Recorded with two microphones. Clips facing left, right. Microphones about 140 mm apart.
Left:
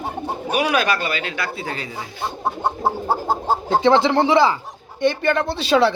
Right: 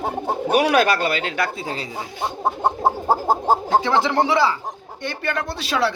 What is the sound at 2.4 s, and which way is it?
Bird, 20° right (ahead or behind).